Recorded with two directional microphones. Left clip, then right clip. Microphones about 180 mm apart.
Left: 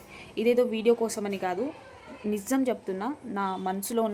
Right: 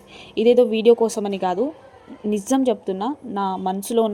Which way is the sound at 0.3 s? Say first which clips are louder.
Right 9 dB; 20° right (ahead or behind).